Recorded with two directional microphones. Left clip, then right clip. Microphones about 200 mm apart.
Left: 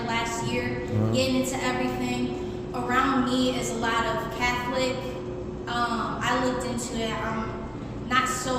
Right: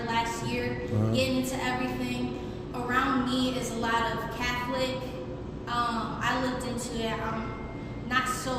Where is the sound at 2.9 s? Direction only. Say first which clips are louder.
Left 3 dB; centre (ahead or behind).